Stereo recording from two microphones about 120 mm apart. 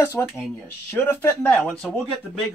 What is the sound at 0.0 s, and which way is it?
Speech, 20° left (ahead or behind).